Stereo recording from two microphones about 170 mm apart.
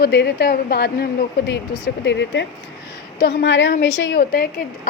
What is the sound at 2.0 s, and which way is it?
A woman's voice, 90° left.